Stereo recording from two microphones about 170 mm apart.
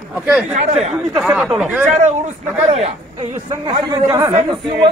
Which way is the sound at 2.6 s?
40° right (ahead or behind).